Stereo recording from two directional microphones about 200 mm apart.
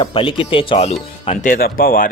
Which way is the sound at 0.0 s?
25° left (ahead or behind).